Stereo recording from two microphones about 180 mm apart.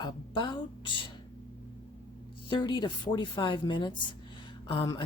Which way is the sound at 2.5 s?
25° left (ahead or behind).